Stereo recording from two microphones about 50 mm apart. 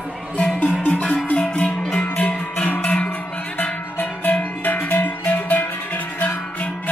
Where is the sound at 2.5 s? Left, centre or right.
Left.